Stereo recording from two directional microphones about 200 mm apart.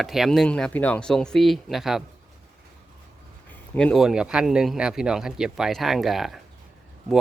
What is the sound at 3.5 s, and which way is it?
Speech, 5° left (ahead or behind).